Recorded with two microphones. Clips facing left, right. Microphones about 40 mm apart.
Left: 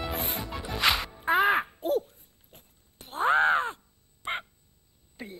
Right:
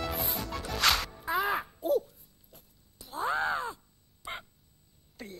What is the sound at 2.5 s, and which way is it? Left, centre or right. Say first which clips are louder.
Crow: left 3 dB; left.